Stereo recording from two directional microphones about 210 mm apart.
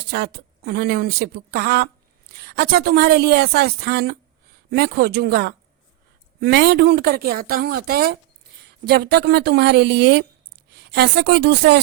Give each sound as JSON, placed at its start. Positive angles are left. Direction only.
{"t": 0.1, "sound": "a woman's voice", "side_deg": -50}